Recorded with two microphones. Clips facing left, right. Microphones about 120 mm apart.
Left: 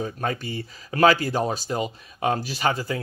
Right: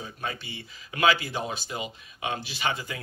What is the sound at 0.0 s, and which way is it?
Speech, 45° left (ahead or behind).